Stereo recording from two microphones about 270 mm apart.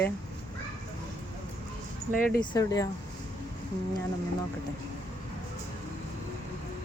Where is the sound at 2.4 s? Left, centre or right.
Centre.